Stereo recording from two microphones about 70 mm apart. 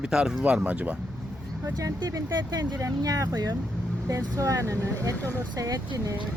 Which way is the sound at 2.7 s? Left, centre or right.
Right.